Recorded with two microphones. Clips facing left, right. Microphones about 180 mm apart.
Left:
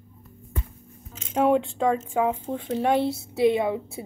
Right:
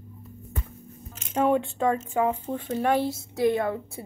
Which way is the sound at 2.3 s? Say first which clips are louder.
Left 1 dB; 10° left (ahead or behind).